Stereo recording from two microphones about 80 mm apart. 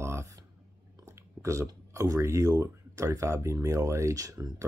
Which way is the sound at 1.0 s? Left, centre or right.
Right.